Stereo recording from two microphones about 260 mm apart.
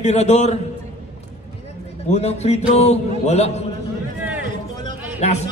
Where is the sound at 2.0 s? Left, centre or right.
Left.